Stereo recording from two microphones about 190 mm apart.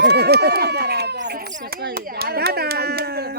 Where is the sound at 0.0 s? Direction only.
60° right (ahead or behind).